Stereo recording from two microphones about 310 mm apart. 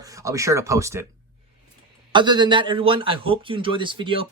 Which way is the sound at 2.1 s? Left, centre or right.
Centre.